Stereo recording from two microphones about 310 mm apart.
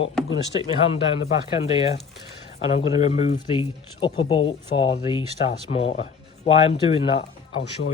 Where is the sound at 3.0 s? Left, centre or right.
Left.